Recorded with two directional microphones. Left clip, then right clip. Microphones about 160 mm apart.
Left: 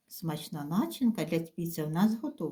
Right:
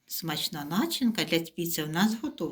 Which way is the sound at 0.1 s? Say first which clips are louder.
Right 7 dB; 55° left (ahead or behind).